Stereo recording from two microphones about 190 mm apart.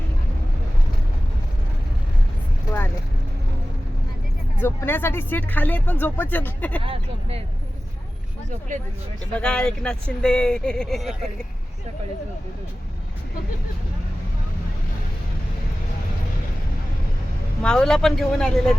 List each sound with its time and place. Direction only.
4.6 s speech: 10° left (ahead or behind)
6.8 s speech: 30° right (ahead or behind)
9.3 s speech: 5° left (ahead or behind)
17.6 s speech: 5° left (ahead or behind)